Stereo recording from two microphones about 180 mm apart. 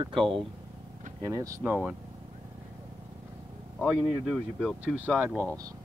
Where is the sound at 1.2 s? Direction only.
20° right (ahead or behind).